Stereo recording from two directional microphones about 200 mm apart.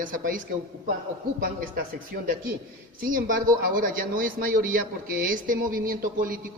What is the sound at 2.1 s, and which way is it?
A man's voice, 50° right (ahead or behind).